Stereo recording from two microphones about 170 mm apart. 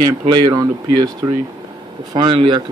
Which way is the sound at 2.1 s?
30° right (ahead or behind).